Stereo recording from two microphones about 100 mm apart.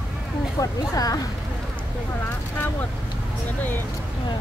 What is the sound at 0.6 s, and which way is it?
Speech, 35° left (ahead or behind).